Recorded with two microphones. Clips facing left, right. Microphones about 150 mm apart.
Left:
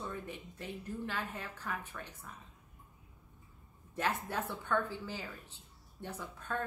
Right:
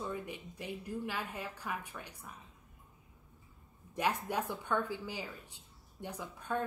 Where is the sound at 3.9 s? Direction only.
15° right (ahead or behind).